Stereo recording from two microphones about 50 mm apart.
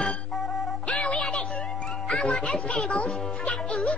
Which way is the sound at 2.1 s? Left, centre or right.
Centre.